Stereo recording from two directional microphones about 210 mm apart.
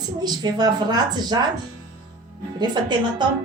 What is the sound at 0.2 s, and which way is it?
A woman's voice, 20° right (ahead or behind).